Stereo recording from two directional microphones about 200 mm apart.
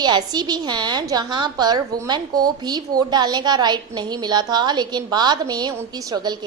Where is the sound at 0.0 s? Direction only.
20° right (ahead or behind).